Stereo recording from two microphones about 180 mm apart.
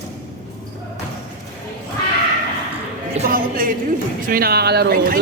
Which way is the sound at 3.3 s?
50° right (ahead or behind).